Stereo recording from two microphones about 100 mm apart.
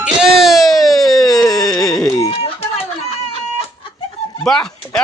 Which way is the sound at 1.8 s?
5° left (ahead or behind).